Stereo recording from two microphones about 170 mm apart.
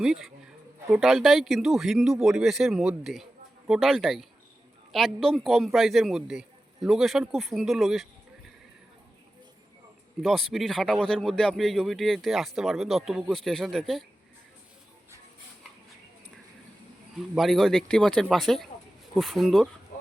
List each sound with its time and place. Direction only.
0.0 s speech: centre (ahead or behind)
10.2 s speech: centre (ahead or behind)
17.3 s speech: centre (ahead or behind)
19.9 s a sound: 55° left (ahead or behind)